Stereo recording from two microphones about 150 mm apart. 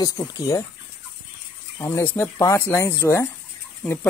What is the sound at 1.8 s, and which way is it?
Speech, 20° left (ahead or behind).